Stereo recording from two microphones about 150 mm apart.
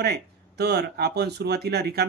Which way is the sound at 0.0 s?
90° right.